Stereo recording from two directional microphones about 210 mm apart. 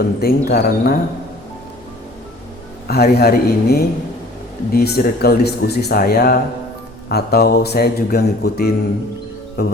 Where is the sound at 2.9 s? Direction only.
50° left (ahead or behind).